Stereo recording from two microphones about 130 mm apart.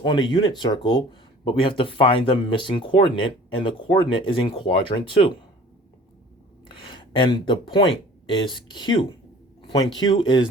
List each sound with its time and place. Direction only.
0.0 s speech: 35° left (ahead or behind)
6.8 s speech: 40° left (ahead or behind)